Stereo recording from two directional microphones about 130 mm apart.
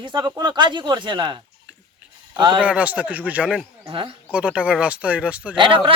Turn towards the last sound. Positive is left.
turn(degrees=-40)  # may be behind; listen again after turning